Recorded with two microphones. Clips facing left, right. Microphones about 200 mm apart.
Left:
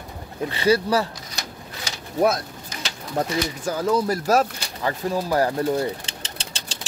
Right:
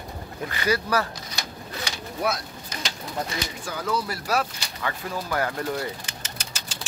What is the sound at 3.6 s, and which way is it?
Speech, 40° left (ahead or behind).